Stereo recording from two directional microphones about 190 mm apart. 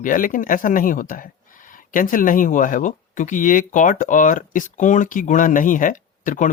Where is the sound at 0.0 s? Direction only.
45° left (ahead or behind).